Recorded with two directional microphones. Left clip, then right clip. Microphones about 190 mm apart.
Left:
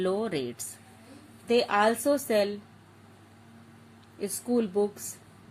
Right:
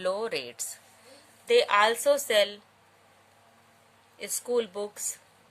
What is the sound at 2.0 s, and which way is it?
Speech, 35° right (ahead or behind).